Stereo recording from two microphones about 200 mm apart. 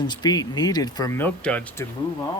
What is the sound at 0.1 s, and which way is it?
Speech, 20° left (ahead or behind).